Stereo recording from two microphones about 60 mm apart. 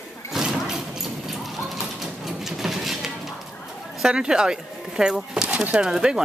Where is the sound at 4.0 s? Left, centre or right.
Centre.